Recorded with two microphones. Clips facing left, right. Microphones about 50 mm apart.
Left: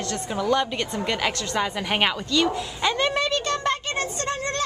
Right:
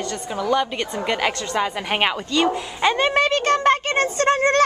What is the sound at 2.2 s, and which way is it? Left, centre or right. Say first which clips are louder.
Speech: right 2 dB; right.